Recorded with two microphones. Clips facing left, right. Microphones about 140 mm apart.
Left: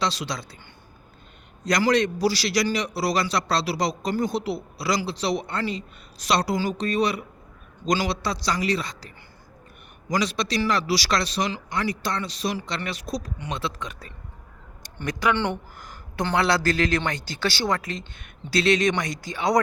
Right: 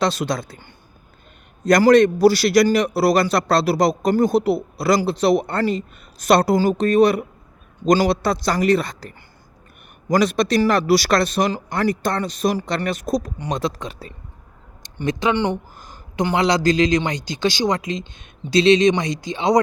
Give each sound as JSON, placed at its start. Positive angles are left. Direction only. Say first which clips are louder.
{"t": 0.0, "sound": "a man's voice", "louder": "right 7 dB", "side_deg": -50}
{"t": 1.6, "sound": "a man's voice", "louder": "right 9 dB", "side_deg": -50}
{"t": 14.8, "sound": "speech", "louder": "right 4 dB", "side_deg": -25}